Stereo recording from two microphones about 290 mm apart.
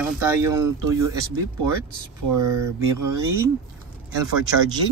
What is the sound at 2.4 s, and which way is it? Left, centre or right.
Speech, right.